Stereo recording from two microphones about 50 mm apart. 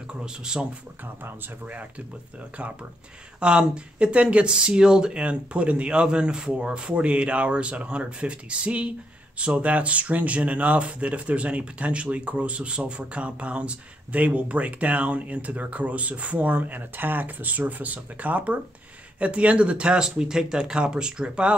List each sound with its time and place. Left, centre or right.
0.2 s speech: centre
1.7 s speech: right